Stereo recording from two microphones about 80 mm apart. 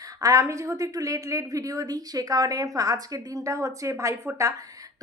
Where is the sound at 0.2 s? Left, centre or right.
Right.